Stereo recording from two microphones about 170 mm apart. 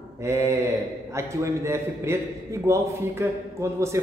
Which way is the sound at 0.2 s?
15° right (ahead or behind).